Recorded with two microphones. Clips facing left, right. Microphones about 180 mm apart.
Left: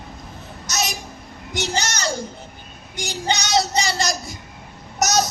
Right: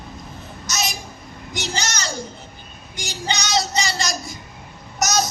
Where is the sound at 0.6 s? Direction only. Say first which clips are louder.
Left 1 dB; 65° left (ahead or behind).